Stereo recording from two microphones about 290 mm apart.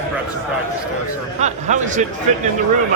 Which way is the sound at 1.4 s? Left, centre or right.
Right.